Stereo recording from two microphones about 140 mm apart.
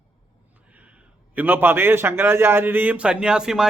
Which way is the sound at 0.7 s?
10° right (ahead or behind).